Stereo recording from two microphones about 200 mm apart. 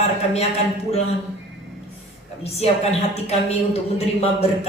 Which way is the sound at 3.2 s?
30° left (ahead or behind).